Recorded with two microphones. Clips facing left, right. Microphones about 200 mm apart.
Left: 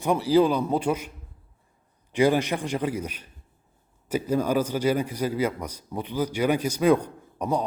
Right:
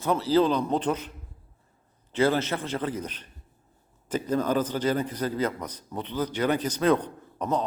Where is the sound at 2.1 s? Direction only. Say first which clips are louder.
Left 2 dB; 15° left (ahead or behind).